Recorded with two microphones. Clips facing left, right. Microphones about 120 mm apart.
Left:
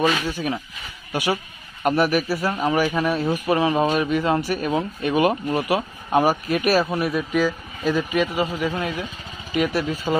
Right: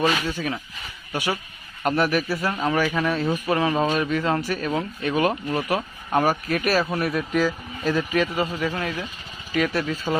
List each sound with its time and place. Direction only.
0.0 s a man's voice: 5° left (ahead or behind)
8.6 s speech: 15° left (ahead or behind)